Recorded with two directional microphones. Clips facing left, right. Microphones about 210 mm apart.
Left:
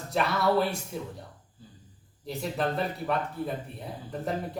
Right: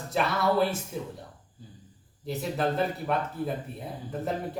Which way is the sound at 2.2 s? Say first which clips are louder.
Right 1 dB; centre (ahead or behind).